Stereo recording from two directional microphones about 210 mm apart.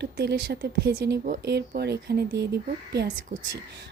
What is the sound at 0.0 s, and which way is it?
A woman's voice, 55° right (ahead or behind).